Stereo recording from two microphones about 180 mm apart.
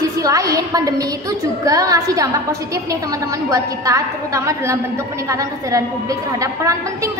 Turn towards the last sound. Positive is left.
turn(degrees=-15)  # may be behind; listen again after turning